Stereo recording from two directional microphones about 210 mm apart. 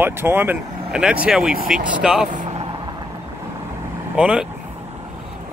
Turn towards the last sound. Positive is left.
turn(degrees=-5)  # may be behind; listen again after turning